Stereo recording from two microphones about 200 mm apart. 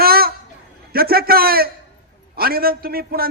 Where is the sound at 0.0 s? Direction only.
50° right (ahead or behind).